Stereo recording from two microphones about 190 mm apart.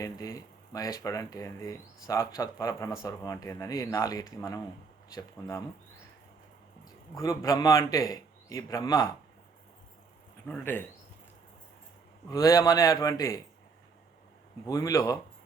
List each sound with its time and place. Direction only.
0.0 s speech: 20° left (ahead or behind)
7.2 s speech: 20° left (ahead or behind)
10.5 s speech: 10° left (ahead or behind)
12.3 s speech: 20° left (ahead or behind)
14.7 s speech: 20° left (ahead or behind)